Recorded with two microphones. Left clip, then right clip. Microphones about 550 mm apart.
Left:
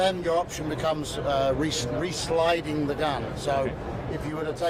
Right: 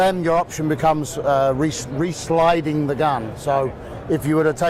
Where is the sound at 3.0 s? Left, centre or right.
Right.